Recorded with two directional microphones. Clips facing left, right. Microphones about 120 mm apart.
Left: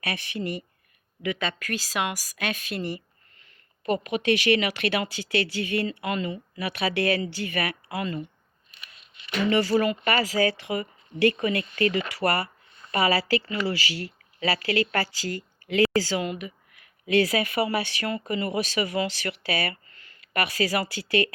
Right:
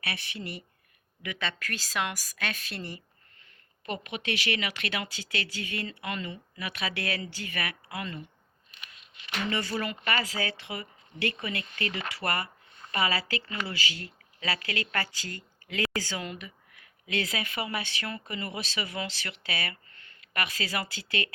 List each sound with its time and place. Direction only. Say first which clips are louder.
0.0 s speech: left 6 dB; 40° left (ahead or behind)
1.2 s a woman's voice: left 6 dB; 20° left (ahead or behind)
3.8 s speech: left 10 dB; 35° left (ahead or behind)
9.5 s speech: left 11 dB; 40° left (ahead or behind)
16.2 s a woman's voice: left 8 dB; 15° left (ahead or behind)
17.1 s speech: left 10 dB; 35° left (ahead or behind)